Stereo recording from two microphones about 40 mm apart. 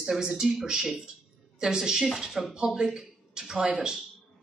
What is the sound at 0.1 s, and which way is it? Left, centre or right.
A woman's voice, centre.